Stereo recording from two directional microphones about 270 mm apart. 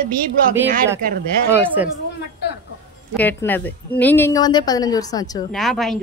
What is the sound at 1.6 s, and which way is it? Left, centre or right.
Speech, centre.